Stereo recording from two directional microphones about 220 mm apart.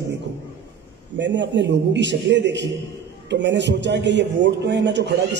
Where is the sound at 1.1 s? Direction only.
55° right (ahead or behind).